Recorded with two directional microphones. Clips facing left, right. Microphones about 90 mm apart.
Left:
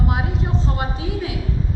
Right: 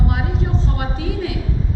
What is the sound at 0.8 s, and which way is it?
Speech, 25° left (ahead or behind).